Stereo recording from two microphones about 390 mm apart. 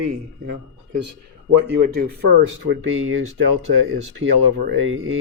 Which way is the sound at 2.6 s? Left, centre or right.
Right.